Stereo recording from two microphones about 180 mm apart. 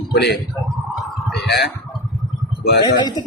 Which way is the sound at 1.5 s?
65° left (ahead or behind).